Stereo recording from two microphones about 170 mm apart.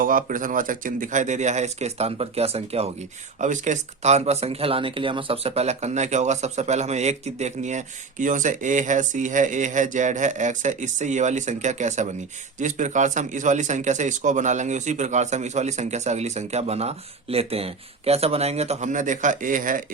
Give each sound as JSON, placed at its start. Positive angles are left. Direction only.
{"t": 0.0, "sound": "speech", "side_deg": -55}